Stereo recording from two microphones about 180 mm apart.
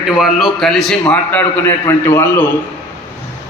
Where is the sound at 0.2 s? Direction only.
Centre (ahead or behind).